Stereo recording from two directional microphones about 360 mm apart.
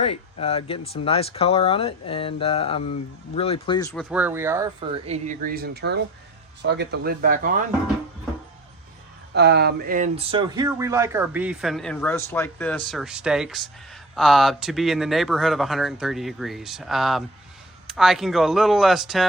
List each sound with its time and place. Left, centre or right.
0.0 s speech: centre
4.1 s speech: centre; by 7.6 s right
9.3 s speech: right; by 19.3 s centre